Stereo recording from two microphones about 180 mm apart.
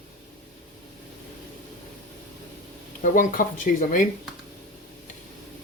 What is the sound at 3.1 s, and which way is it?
Speech, 50° left (ahead or behind).